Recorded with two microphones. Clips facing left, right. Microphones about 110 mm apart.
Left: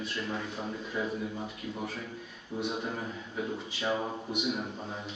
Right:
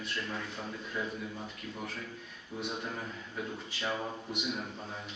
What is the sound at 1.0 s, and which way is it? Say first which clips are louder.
Speech: left 5 dB; 20° left (ahead or behind).